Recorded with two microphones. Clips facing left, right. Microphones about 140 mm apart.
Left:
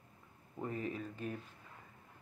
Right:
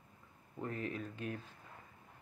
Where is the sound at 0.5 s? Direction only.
10° left (ahead or behind).